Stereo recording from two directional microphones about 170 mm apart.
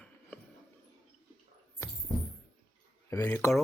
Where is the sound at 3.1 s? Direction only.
15° left (ahead or behind).